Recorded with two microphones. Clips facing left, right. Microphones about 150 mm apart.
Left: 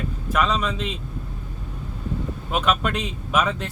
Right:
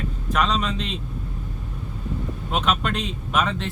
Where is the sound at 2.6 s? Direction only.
5° left (ahead or behind).